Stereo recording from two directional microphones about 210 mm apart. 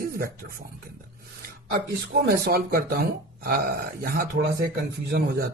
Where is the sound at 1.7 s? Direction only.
50° right (ahead or behind).